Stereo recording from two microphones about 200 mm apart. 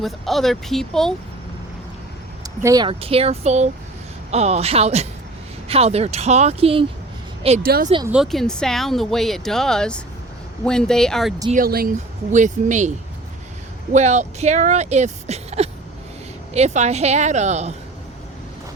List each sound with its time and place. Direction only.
0.0 s speech: centre (ahead or behind)
2.6 s speech: 15° right (ahead or behind)
7.6 s speech: 45° right (ahead or behind)
8.0 s speech: 5° right (ahead or behind)
11.5 s speech: 45° right (ahead or behind)
13.9 s speech: 35° right (ahead or behind)